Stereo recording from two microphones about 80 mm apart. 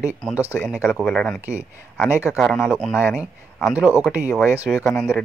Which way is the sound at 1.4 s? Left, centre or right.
Right.